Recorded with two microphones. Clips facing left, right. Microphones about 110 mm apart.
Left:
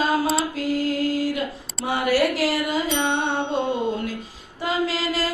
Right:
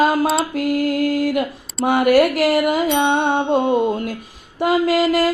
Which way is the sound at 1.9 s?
60° right (ahead or behind).